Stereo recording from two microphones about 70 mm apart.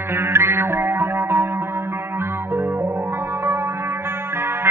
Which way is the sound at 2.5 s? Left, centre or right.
Right.